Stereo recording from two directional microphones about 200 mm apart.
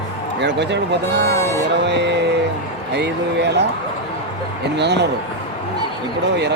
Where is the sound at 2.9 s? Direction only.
55° right (ahead or behind).